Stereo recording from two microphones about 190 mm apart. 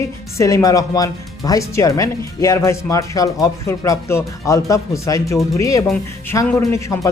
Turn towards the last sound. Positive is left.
turn(degrees=15)  # may be behind; listen again after turning